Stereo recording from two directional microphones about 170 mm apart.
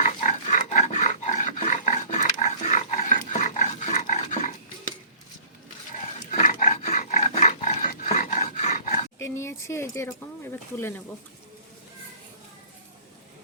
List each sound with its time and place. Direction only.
0.0 s dog: 45° left (ahead or behind)
6.3 s dog: 45° left (ahead or behind)
9.1 s a sound: 15° left (ahead or behind)
10.8 s speech: 15° left (ahead or behind)